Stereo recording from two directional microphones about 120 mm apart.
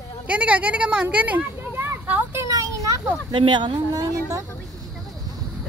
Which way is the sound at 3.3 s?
40° right (ahead or behind).